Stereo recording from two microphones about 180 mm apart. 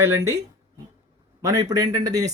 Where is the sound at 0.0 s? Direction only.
15° right (ahead or behind).